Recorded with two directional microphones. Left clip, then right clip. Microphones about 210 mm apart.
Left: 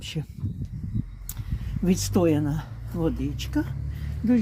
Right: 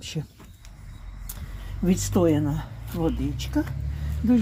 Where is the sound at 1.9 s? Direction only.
10° left (ahead or behind).